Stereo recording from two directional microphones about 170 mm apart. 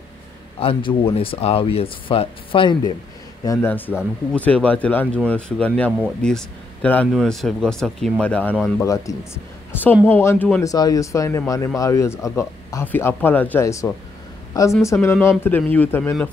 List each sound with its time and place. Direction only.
0.6 s speech: 30° left (ahead or behind)
3.4 s speech: 10° left (ahead or behind)